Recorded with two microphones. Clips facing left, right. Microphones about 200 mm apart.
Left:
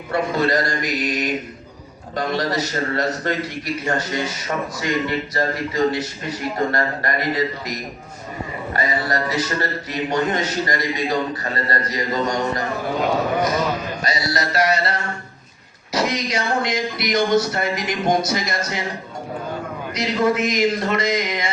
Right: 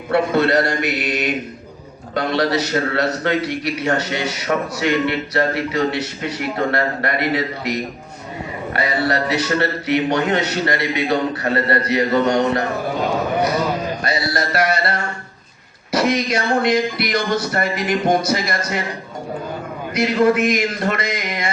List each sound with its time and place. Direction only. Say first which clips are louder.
0.1 s a man's voice: right 4 dB; 70° right (ahead or behind)
14.0 s speech: right 2 dB; 60° right (ahead or behind)
19.9 s speech: right 4 dB; 55° right (ahead or behind)